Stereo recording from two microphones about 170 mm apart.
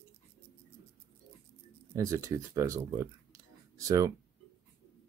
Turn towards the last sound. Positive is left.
turn(degrees=-20)  # may be behind; listen again after turning